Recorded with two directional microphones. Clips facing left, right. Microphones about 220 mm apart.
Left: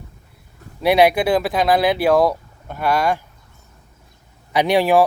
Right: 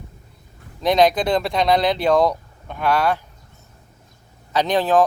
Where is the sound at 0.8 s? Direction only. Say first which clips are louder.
Left 2 dB; 10° left (ahead or behind).